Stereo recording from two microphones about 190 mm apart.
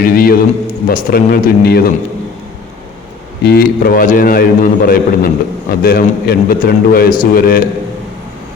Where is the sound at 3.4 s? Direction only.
55° left (ahead or behind).